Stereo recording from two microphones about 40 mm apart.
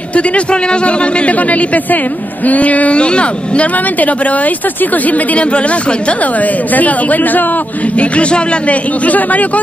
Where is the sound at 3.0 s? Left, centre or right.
Left.